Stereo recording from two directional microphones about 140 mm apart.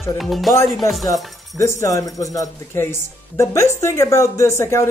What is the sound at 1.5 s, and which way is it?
Speech, 20° left (ahead or behind).